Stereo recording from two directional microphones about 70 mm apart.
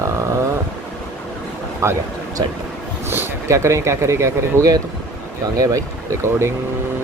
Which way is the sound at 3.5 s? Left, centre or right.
Right.